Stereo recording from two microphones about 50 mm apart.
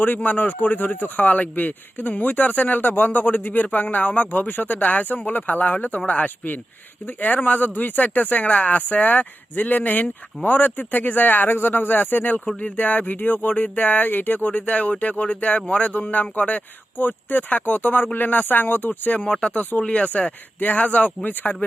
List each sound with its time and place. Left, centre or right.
0.0 s speech: left; by 20.1 s centre
20.6 s speech: left